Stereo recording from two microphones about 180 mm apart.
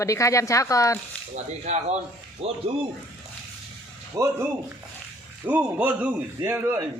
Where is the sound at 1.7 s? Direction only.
40° right (ahead or behind).